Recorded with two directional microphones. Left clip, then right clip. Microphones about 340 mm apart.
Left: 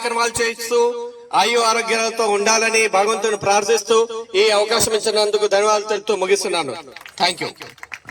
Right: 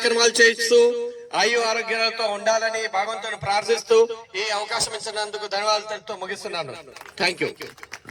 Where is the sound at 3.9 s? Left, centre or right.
Left.